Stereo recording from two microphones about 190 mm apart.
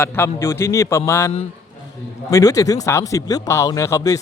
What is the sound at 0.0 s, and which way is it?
Speech, 10° left (ahead or behind).